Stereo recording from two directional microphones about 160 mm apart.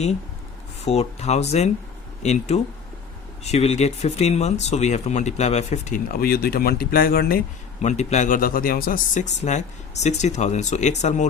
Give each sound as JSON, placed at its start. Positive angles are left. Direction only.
{"t": 0.9, "sound": "speech", "side_deg": 40}
{"t": 7.8, "sound": "speech", "side_deg": 45}
{"t": 9.4, "sound": "speech", "side_deg": 45}